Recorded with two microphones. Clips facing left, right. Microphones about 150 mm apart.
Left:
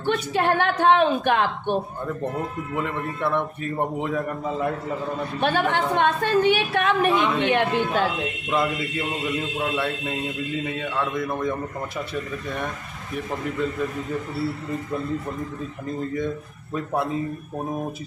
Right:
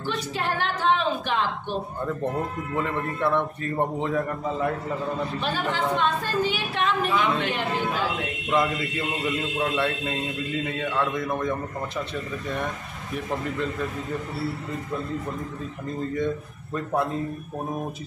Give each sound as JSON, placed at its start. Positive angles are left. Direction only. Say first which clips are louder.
{"t": 0.0, "sound": "a woman's voice", "louder": "left 6 dB", "side_deg": 55}
{"t": 2.7, "sound": "a man's voice", "louder": "right 1 dB", "side_deg": 0}
{"t": 5.4, "sound": "a woman's voice", "louder": "left 8 dB", "side_deg": 60}
{"t": 9.6, "sound": "a man's voice", "louder": "right 2 dB", "side_deg": 5}
{"t": 16.7, "sound": "a man's voice", "louder": "left 1 dB", "side_deg": 0}